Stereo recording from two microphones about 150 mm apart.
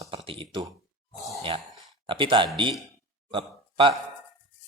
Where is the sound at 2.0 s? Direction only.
35° right (ahead or behind).